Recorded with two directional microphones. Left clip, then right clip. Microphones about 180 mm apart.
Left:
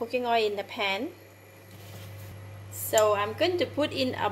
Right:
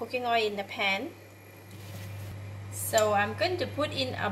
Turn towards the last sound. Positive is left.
turn(degrees=45)  # may be behind; listen again after turning